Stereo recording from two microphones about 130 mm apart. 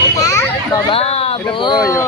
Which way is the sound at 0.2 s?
25° left (ahead or behind).